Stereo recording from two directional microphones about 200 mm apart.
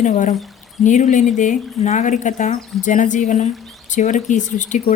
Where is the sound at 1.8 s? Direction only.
35° left (ahead or behind).